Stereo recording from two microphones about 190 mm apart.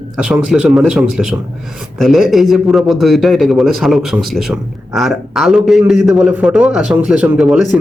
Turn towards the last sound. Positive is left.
turn(degrees=-5)  # may be behind; listen again after turning